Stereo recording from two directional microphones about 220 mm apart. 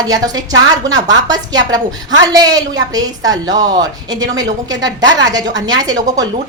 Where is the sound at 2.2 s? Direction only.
15° right (ahead or behind).